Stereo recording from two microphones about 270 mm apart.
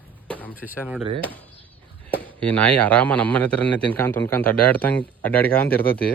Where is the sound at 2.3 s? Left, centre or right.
Centre.